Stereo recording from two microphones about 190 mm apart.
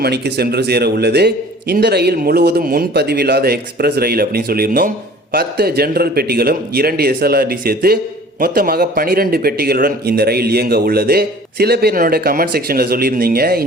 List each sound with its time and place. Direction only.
0.0 s a man's voice: 60° right (ahead or behind)